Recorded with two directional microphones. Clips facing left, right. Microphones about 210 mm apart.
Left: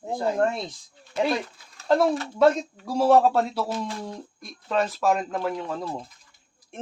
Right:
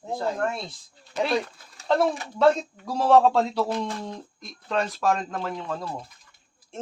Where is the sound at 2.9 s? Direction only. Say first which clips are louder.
Even; 10° left (ahead or behind).